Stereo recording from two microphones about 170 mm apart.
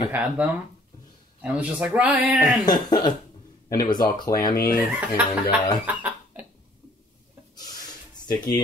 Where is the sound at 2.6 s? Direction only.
25° left (ahead or behind).